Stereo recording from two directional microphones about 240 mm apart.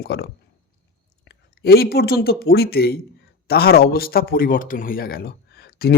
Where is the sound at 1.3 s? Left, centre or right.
Left.